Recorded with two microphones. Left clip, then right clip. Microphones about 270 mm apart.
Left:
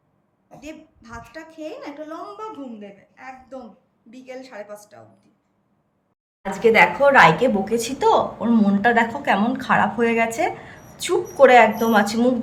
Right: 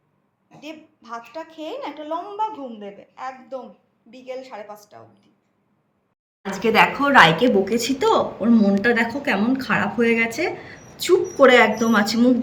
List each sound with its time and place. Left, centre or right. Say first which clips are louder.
0.4 s a woman's voice: even; centre
2.8 s a woman's voice: right 6 dB; right
4.1 s a woman's voice: right 3 dB; centre
6.5 s a woman's voice: left 2 dB; centre